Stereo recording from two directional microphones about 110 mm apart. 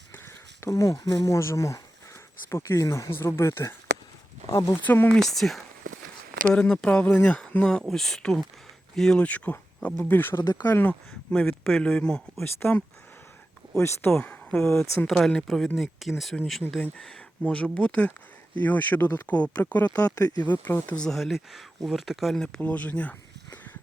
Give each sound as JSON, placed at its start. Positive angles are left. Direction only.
{"t": 0.1, "sound": "speech", "side_deg": 25}
{"t": 5.3, "sound": "speech", "side_deg": 0}
{"t": 10.4, "sound": "speech", "side_deg": 40}
{"t": 10.7, "sound": "speech", "side_deg": 15}
{"t": 12.5, "sound": "speech", "side_deg": 20}
{"t": 14.8, "sound": "speech", "side_deg": 5}
{"t": 20.0, "sound": "speech", "side_deg": 30}
{"t": 20.4, "sound": "speech", "side_deg": 20}
{"t": 20.9, "sound": "speech", "side_deg": 5}